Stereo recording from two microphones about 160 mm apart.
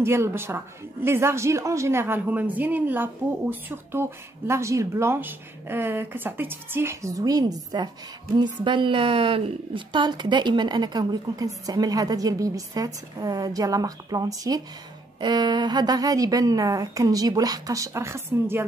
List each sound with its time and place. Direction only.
0.0 s a woman's voice: 15° right (ahead or behind)